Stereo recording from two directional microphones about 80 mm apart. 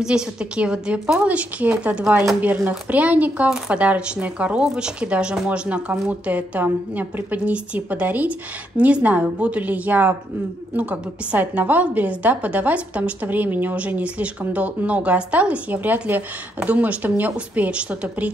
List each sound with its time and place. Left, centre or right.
0.0 s a woman's voice: centre